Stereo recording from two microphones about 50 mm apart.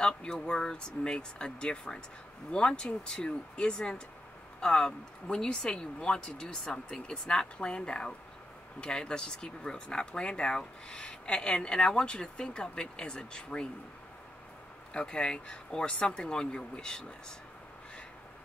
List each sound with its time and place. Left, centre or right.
0.0 s speech: centre
15.0 s speech: centre